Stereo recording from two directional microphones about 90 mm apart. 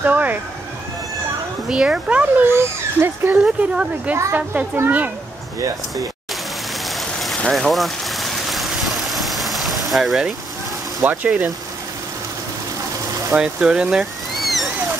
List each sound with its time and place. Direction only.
0.0 s speech: 20° right (ahead or behind)
1.7 s speech: 10° right (ahead or behind)
2.5 s speech: 25° right (ahead or behind)
3.4 s speech: 10° right (ahead or behind)
6.9 s a sound: centre (ahead or behind)
11.1 s speech: 15° right (ahead or behind)
13.4 s speech: 10° right (ahead or behind)